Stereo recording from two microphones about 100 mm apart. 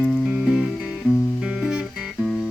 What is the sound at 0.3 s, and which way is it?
Music, 10° right (ahead or behind).